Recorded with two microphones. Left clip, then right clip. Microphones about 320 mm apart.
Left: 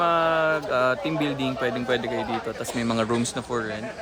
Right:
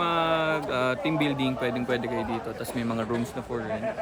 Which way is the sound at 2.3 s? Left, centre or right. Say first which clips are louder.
Left 3 dB; left.